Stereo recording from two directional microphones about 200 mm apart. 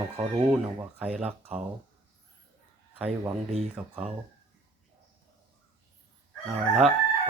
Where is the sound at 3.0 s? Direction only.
5° right (ahead or behind).